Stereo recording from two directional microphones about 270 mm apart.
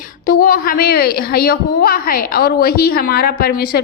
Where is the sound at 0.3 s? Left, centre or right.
Left.